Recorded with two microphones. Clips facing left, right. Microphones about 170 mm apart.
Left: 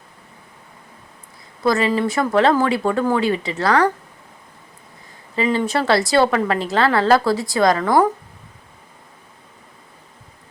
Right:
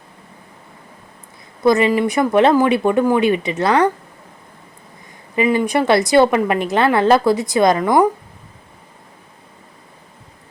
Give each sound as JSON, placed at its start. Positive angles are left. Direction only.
{"t": 1.6, "sound": "a woman's voice", "side_deg": -20}
{"t": 5.3, "sound": "a woman's voice", "side_deg": -15}